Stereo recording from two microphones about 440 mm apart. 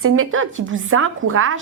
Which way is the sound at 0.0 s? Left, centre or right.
Right.